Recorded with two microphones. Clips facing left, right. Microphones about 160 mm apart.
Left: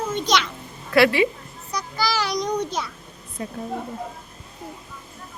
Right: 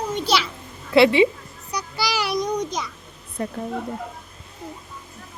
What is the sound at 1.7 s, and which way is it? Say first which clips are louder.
Child singing: left 1 dB; 10° right (ahead or behind).